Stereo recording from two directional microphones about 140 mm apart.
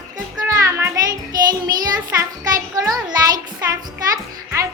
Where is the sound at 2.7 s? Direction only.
25° right (ahead or behind).